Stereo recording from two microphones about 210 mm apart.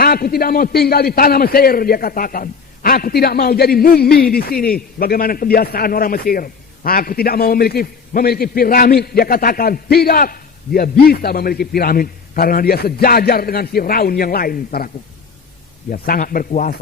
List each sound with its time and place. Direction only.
0.0 s a man's voice: 45° left (ahead or behind)
15.9 s speech: 40° left (ahead or behind)